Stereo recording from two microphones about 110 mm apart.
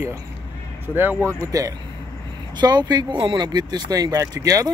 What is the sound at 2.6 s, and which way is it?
Speech, 40° right (ahead or behind).